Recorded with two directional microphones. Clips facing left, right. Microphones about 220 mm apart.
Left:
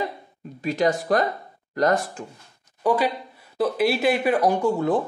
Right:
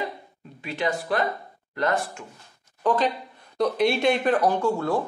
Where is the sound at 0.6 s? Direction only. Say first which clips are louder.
Left 6 dB; 40° left (ahead or behind).